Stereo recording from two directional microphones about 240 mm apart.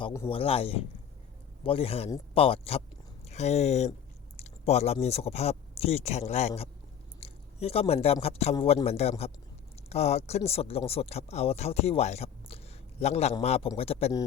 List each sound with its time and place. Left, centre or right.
0.0 s speech: centre
0.3 s speech: left